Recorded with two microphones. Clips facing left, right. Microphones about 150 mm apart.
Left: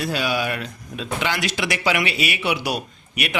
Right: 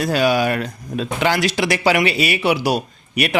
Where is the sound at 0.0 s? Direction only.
45° right (ahead or behind).